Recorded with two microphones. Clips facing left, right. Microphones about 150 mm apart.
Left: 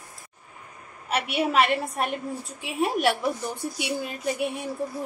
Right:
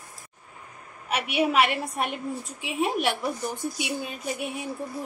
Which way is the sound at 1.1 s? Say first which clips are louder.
Even; 5° right (ahead or behind).